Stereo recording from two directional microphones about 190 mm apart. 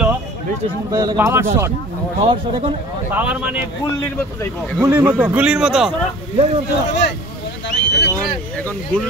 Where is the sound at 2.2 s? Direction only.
30° right (ahead or behind).